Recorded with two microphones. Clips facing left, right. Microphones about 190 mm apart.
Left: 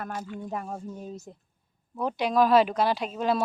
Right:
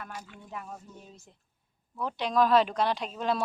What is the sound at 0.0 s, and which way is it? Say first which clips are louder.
Speech: left 9 dB; 45° left (ahead or behind).